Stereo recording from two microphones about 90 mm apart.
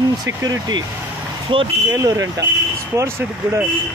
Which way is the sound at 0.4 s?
45° right (ahead or behind).